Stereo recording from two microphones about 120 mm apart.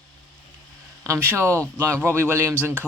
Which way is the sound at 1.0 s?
20° right (ahead or behind).